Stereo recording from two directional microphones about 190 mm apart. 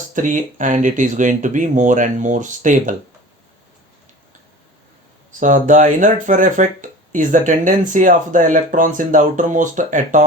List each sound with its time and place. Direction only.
0.1 s speech: 40° right (ahead or behind)
5.4 s speech: 40° right (ahead or behind)